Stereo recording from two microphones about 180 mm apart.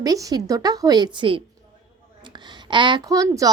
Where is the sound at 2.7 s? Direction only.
25° right (ahead or behind).